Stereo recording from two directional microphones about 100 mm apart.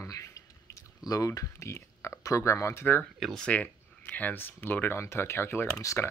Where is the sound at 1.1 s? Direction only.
35° left (ahead or behind).